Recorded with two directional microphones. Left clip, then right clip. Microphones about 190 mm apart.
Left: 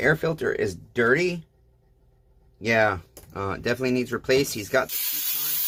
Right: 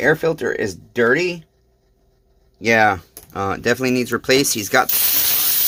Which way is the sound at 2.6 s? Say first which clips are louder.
Right 7 dB; 25° right (ahead or behind).